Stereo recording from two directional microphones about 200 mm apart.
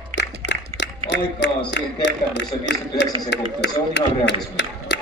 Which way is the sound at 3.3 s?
60° left (ahead or behind).